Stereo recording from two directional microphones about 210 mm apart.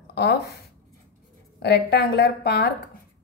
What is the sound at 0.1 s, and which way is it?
Speech, 50° left (ahead or behind).